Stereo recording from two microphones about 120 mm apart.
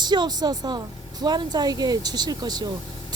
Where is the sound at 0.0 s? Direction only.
35° right (ahead or behind).